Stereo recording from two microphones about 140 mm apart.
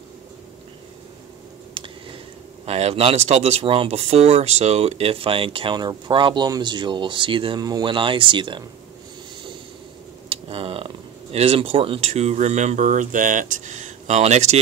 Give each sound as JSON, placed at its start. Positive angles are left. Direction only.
{"t": 2.6, "sound": "speech", "side_deg": -45}
{"t": 10.3, "sound": "a sound", "side_deg": -40}
{"t": 11.3, "sound": "speech", "side_deg": -45}